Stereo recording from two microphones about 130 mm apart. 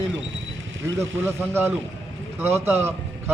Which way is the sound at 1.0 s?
20° right (ahead or behind).